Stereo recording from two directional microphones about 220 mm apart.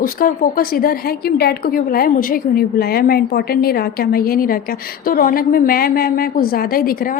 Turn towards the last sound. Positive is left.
turn(degrees=40)  # may be behind; listen again after turning